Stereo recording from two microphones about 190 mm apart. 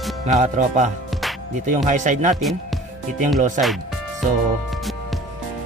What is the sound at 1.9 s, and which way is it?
Music, 40° right (ahead or behind).